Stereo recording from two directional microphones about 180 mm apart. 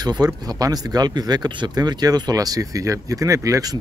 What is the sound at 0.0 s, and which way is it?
Speech, 20° right (ahead or behind).